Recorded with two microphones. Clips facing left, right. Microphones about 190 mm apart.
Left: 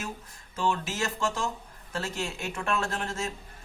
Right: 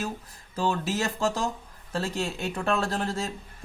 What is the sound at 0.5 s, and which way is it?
A man's voice, 35° right (ahead or behind).